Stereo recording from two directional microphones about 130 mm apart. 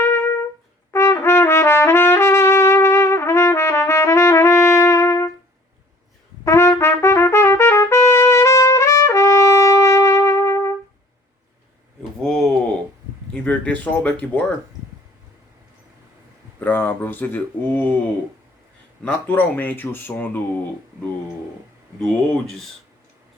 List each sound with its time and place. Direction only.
0.0 s trumpet: 15° left (ahead or behind)
6.4 s trumpet: 20° left (ahead or behind)
12.2 s a sound: 5° left (ahead or behind)
16.6 s speech: 15° left (ahead or behind)
19.0 s speech: 15° left (ahead or behind)
22.0 s a sound: 5° left (ahead or behind)